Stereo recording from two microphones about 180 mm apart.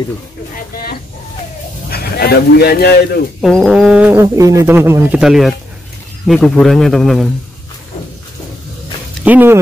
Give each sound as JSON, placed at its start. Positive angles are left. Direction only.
{"t": 1.9, "sound": "speech", "side_deg": 60}
{"t": 3.3, "sound": "speech", "side_deg": 0}
{"t": 9.2, "sound": "speech", "side_deg": -10}